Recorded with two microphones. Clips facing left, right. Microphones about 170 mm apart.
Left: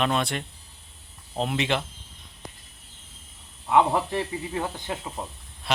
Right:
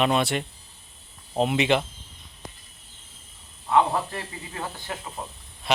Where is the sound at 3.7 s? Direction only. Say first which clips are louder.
Left 1 dB; 15° left (ahead or behind).